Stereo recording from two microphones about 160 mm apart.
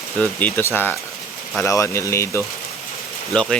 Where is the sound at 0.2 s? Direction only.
10° left (ahead or behind).